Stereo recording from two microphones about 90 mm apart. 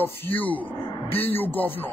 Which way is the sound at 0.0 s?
20° left (ahead or behind).